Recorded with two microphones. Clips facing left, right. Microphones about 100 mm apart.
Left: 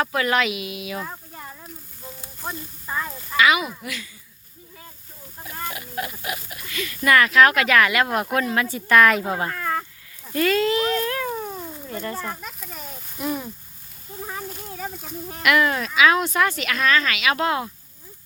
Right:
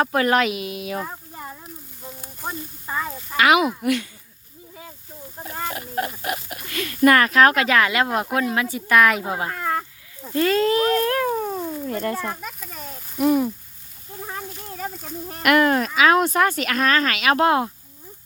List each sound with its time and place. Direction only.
0.0 s speech: 40° right (ahead or behind)
1.0 s a sound: 15° right (ahead or behind)
2.4 s speech: 10° right (ahead or behind)
3.3 s speech: 60° right (ahead or behind)
5.7 s speech: 45° right (ahead or behind); by 9.8 s 10° right (ahead or behind)
10.2 s speech: 30° right (ahead or behind)
11.9 s speech: 60° right (ahead or behind)
12.2 s a sound: 5° right (ahead or behind)
13.1 s speech: 50° right (ahead or behind)
14.2 s a sound: centre (ahead or behind)
15.4 s speech: 45° right (ahead or behind)